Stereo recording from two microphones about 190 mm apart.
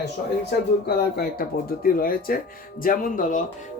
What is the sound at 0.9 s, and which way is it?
Speech, 55° left (ahead or behind).